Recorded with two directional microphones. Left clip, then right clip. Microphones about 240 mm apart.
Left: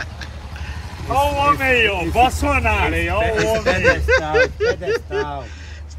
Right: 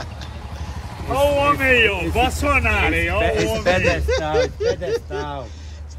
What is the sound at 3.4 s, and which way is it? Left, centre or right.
Speech, centre.